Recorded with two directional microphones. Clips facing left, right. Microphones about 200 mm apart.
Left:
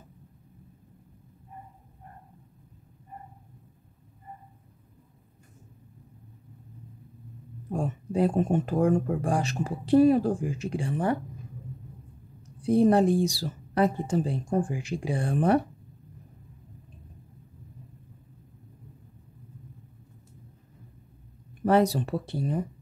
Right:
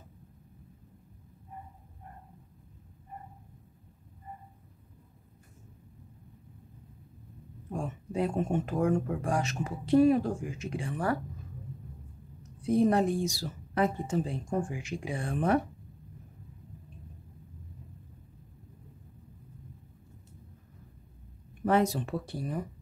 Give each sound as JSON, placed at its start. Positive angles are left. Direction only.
{"t": 7.7, "sound": "speech", "side_deg": 35}
{"t": 12.6, "sound": "speech", "side_deg": 30}
{"t": 21.6, "sound": "speech", "side_deg": 35}